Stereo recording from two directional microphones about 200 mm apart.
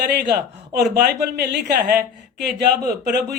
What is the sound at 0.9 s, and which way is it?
Speech, 55° right (ahead or behind).